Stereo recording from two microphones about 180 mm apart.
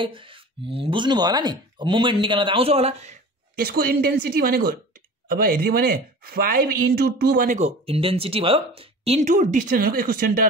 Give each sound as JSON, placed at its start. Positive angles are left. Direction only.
{"t": 0.0, "sound": "speech", "side_deg": -30}
{"t": 3.6, "sound": "speech", "side_deg": -55}